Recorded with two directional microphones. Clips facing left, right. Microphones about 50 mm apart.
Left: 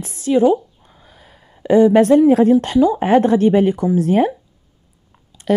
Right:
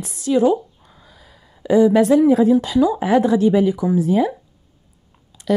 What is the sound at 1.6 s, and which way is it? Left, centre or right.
Speech, left.